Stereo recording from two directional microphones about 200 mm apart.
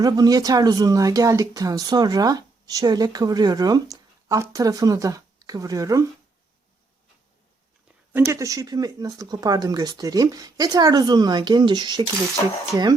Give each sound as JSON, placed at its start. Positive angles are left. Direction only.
{"t": 0.0, "sound": "speech", "side_deg": -20}
{"t": 8.1, "sound": "speech", "side_deg": -15}